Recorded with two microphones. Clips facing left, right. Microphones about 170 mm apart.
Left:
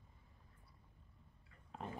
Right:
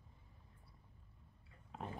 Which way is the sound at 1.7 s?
Centre (ahead or behind).